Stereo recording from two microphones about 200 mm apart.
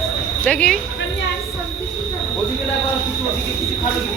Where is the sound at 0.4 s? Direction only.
5° left (ahead or behind).